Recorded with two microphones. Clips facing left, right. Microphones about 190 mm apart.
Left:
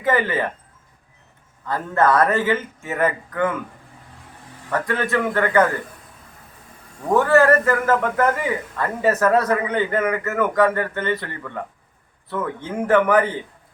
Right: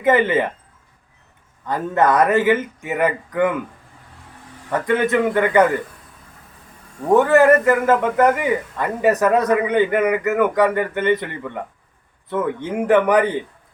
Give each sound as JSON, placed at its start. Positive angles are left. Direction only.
{"t": 0.0, "sound": "a man's voice", "side_deg": -20}
{"t": 1.6, "sound": "a man's voice", "side_deg": -20}
{"t": 4.7, "sound": "a man's voice", "side_deg": -20}
{"t": 7.1, "sound": "a man's voice", "side_deg": -20}